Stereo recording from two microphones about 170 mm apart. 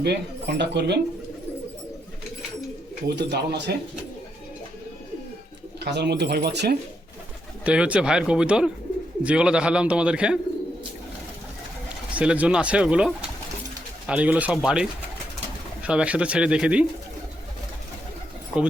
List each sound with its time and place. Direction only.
0.0 s speech: 75° right (ahead or behind)
3.1 s speech: 80° right
5.8 s speech: 80° right
7.6 s speech: 5° right (ahead or behind)
11.9 s speech: 5° right (ahead or behind)